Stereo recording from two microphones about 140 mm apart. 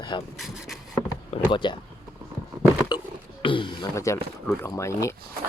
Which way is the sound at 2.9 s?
30° left (ahead or behind).